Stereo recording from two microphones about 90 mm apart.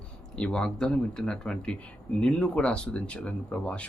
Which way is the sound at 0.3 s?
10° left (ahead or behind).